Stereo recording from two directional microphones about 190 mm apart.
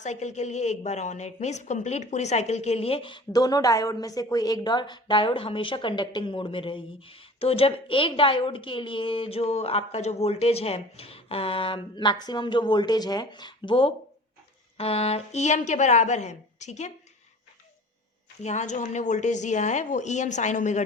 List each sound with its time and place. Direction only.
0.0 s a woman's voice: 40° left (ahead or behind)
18.4 s speech: 40° left (ahead or behind)